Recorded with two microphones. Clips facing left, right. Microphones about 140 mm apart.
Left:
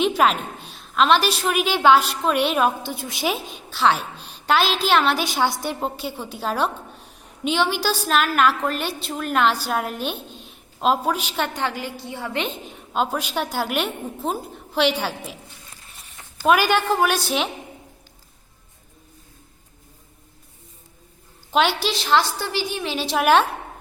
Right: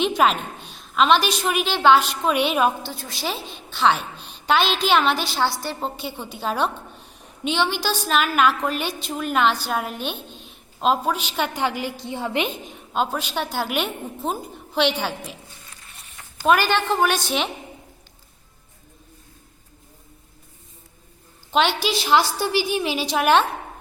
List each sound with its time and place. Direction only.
0.0 s a woman's voice: centre (ahead or behind)
2.8 s a woman's voice: 20° left (ahead or behind)
3.2 s a woman's voice: 5° left (ahead or behind)
5.3 s a woman's voice: 15° left (ahead or behind)
5.8 s a woman's voice: centre (ahead or behind)
11.3 s a woman's voice: 5° right (ahead or behind)
12.7 s a woman's voice: 5° left (ahead or behind)
16.5 s a woman's voice: 10° left (ahead or behind)
21.5 s a woman's voice: 5° left (ahead or behind)
22.0 s a woman's voice: 10° right (ahead or behind)
23.0 s a woman's voice: 5° left (ahead or behind)